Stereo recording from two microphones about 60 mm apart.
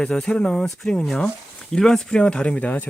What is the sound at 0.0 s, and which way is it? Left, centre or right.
Speech, centre.